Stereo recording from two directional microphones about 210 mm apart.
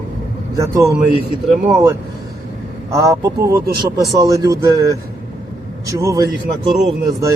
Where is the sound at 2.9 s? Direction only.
15° right (ahead or behind).